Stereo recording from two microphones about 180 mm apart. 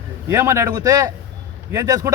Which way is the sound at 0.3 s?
15° right (ahead or behind).